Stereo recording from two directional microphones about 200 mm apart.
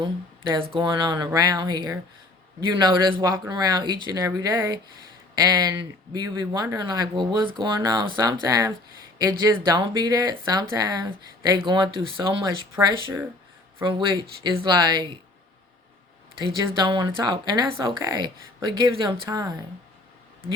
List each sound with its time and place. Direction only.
0.5 s speech: 25° right (ahead or behind)
12.7 s speech: 15° right (ahead or behind)
13.8 s speech: 25° right (ahead or behind)
16.4 s speech: 20° right (ahead or behind)